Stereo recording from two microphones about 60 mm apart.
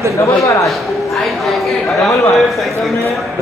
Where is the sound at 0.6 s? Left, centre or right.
Centre.